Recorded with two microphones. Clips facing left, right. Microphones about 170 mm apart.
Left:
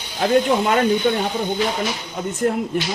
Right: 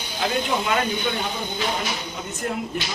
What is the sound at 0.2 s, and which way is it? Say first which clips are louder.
Speech: left 7 dB; 45° left (ahead or behind).